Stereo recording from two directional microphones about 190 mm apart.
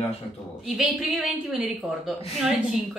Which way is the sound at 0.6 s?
Centre (ahead or behind).